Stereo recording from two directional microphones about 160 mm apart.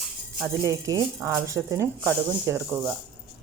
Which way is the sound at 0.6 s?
20° right (ahead or behind).